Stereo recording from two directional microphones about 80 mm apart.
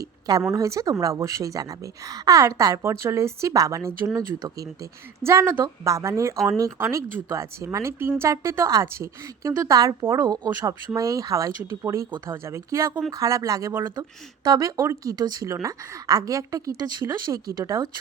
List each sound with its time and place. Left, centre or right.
0.0 s a sound: right
0.5 s speech: right
2.9 s speech: right
9.5 s speech: right
10.9 s speech: right
15.1 s speech: right
15.4 s speech: right